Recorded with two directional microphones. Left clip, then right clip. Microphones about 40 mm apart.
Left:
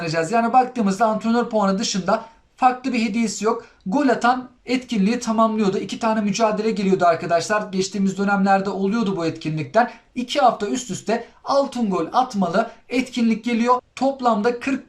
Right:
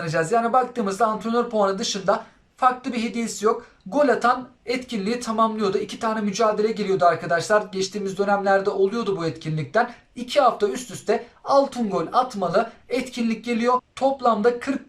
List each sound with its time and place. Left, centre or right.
0.0 s speech: left
11.4 s speech: left